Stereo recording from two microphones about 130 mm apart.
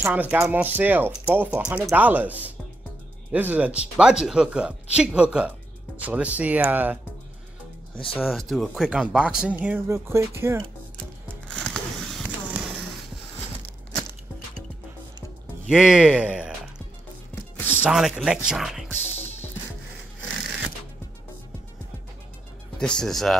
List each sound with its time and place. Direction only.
0.0 s speech: 15° right (ahead or behind)
7.9 s speech: 45° left (ahead or behind)
8.2 s speech: centre (ahead or behind); by 10.6 s 20° right (ahead or behind)
11.4 s a sound: 5° left (ahead or behind)
15.7 s speech: 5° right (ahead or behind)
17.6 s music: 15° left (ahead or behind)
17.8 s speech: 5° right (ahead or behind)
22.8 s speech: 5° left (ahead or behind)